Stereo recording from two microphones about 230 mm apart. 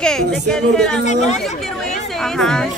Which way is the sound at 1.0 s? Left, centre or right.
Left.